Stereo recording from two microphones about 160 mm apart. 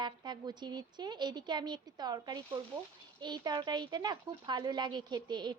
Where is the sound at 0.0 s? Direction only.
30° right (ahead or behind).